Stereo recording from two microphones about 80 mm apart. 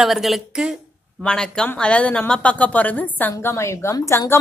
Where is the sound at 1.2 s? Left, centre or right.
Centre; by 3.9 s left.